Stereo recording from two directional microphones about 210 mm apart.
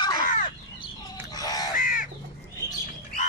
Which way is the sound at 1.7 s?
40° left (ahead or behind).